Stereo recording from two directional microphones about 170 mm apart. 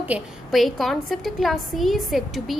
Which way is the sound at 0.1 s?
Centre (ahead or behind).